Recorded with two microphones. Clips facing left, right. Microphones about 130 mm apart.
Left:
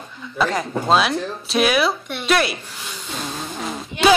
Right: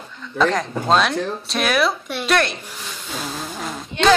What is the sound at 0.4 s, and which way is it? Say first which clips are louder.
Speech: right 2 dB; 5° left (ahead or behind).